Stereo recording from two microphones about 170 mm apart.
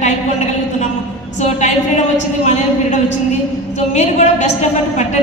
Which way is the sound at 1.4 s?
45° left (ahead or behind).